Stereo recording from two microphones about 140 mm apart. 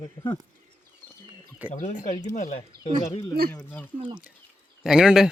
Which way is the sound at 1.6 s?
60° left (ahead or behind).